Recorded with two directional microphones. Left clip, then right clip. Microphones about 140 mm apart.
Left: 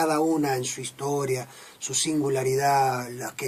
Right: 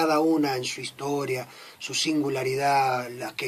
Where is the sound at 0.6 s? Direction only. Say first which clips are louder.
Even; 10° right (ahead or behind).